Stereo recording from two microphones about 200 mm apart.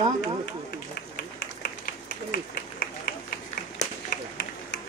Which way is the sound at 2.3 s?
45° left (ahead or behind).